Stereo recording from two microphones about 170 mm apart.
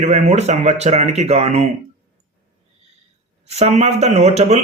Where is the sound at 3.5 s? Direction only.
40° right (ahead or behind).